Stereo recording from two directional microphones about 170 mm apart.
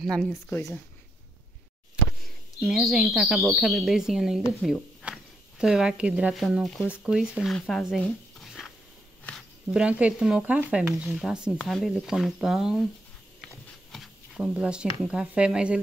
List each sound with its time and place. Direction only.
0.0 s speech: 5° left (ahead or behind)
0.3 s speech: 15° left (ahead or behind)
2.6 s speech: centre (ahead or behind)
13.9 s speech: centre (ahead or behind)